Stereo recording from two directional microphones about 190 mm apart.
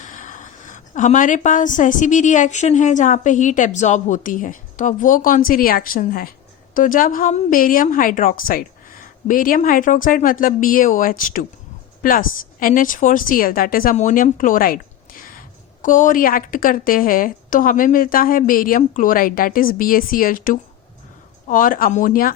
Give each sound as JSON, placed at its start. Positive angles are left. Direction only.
{"t": 0.0, "sound": "a woman's voice", "side_deg": 40}